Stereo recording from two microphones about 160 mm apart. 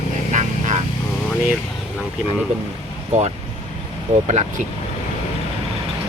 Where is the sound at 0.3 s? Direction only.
50° right (ahead or behind).